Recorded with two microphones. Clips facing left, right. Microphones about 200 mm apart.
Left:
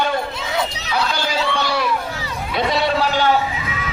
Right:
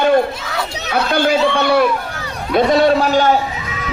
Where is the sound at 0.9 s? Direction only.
55° right (ahead or behind).